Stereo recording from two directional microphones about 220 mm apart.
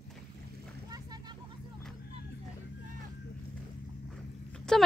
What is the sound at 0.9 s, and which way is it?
Vehicle, 20° right (ahead or behind).